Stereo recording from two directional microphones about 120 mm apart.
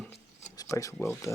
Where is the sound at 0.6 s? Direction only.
25° left (ahead or behind).